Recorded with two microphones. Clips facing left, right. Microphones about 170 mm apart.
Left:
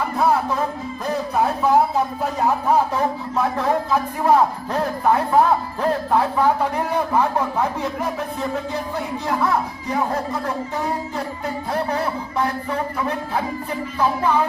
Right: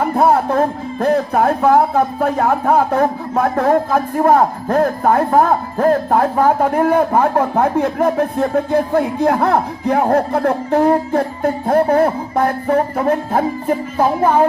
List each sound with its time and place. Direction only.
0.0 s music: 50° right (ahead or behind)